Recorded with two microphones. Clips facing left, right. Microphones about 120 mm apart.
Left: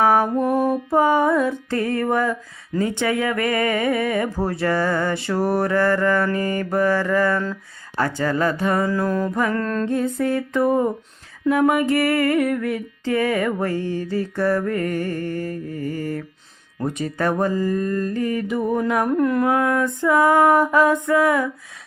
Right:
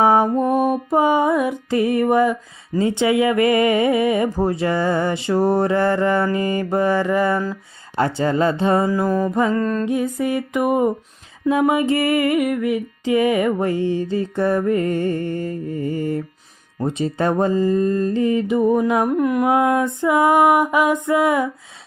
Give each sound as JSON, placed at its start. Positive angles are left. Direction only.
{"t": 0.0, "sound": "mantra", "side_deg": -20}
{"t": 7.5, "sound": "music", "side_deg": -20}
{"t": 8.9, "sound": "mantra", "side_deg": -10}
{"t": 11.4, "sound": "music", "side_deg": -20}